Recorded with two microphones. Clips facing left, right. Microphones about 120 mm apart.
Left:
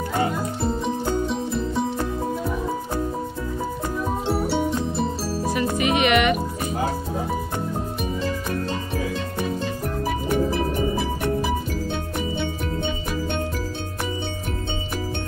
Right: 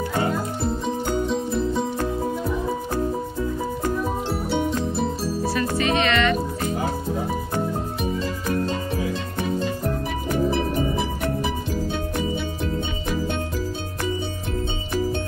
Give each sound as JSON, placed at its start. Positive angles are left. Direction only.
{"t": 4.3, "sound": "music", "side_deg": 0}
{"t": 5.5, "sound": "music", "side_deg": 20}